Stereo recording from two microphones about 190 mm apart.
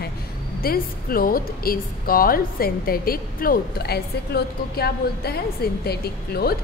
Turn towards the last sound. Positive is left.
turn(degrees=55)  # may be behind; listen again after turning